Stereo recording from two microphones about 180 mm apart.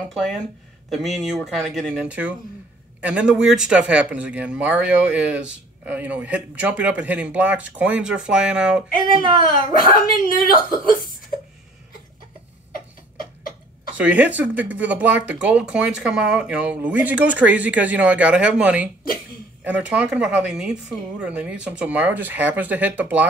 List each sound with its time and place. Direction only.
0.1 s speech: centre (ahead or behind)
9.8 s speech: 50° left (ahead or behind)
13.9 s speech: 10° right (ahead or behind)